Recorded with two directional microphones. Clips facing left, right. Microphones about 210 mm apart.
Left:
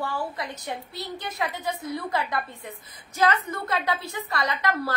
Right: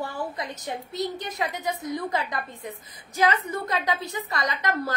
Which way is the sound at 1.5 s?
40° right (ahead or behind).